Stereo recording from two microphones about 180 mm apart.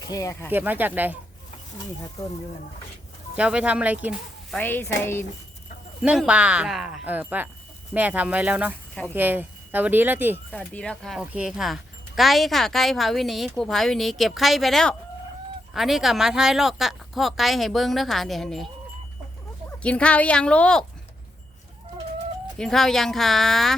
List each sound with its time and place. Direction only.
0.1 s speech: 15° left (ahead or behind)
0.5 s speech: 10° right (ahead or behind)
3.3 s speech: 5° right (ahead or behind)
4.5 s speech: 10° left (ahead or behind)
6.0 s speech: 5° right (ahead or behind)
10.5 s speech: 5° left (ahead or behind)
19.8 s speech: 5° left (ahead or behind)
22.5 s speech: 5° left (ahead or behind)